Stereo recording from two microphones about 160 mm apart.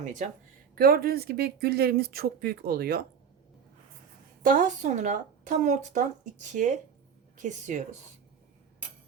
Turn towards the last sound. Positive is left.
turn(degrees=-50)  # may be behind; listen again after turning